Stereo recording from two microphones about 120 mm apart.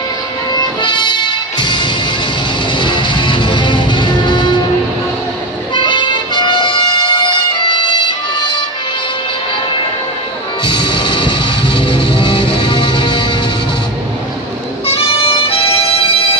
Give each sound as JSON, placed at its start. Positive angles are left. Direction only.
{"t": 0.5, "sound": "music", "side_deg": 35}
{"t": 5.8, "sound": "music", "side_deg": 40}
{"t": 10.6, "sound": "music", "side_deg": 40}
{"t": 14.9, "sound": "music", "side_deg": 50}